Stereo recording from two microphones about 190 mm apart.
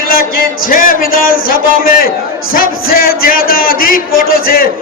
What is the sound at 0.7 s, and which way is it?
A man's voice, 45° left (ahead or behind).